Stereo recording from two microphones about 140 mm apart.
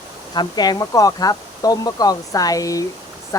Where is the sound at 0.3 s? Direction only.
30° left (ahead or behind).